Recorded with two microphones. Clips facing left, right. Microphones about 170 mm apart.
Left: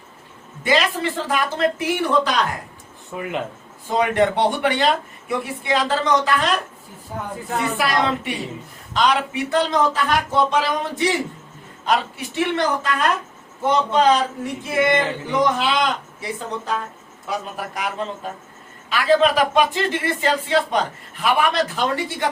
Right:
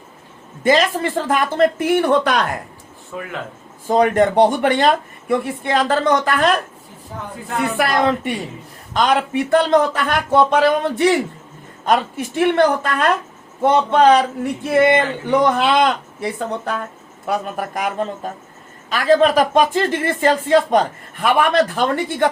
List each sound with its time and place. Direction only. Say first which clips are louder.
0.6 s speech: right 4 dB; 45° right (ahead or behind)
3.8 s speech: right 4 dB; 45° right (ahead or behind); by 11.1 s 60° right (ahead or behind)
11.9 s speech: right 4 dB; 50° right (ahead or behind)